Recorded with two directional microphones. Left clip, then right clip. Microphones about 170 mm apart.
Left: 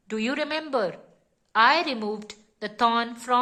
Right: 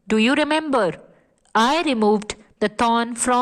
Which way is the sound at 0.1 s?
45° right (ahead or behind).